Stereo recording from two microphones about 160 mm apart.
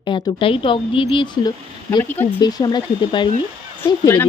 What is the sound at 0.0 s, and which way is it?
Speech, 30° left (ahead or behind).